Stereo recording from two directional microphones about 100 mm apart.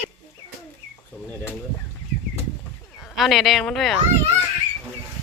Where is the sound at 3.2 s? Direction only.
Centre (ahead or behind).